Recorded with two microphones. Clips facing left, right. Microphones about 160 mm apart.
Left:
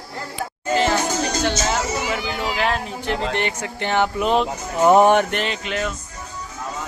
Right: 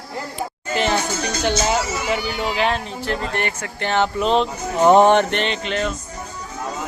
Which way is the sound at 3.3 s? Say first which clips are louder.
Left 1 dB; 20° left (ahead or behind).